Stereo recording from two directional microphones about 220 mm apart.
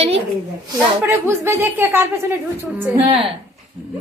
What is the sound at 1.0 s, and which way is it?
A woman's voice, 10° right (ahead or behind).